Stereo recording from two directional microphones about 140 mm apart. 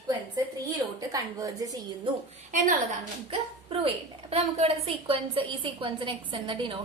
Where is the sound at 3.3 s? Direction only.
40° right (ahead or behind).